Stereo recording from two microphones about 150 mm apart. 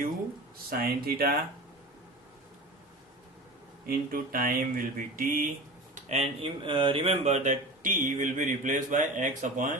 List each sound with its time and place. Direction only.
0.7 s speech: 85° right
3.8 s speech: 75° right (ahead or behind); by 9.6 s 55° right (ahead or behind)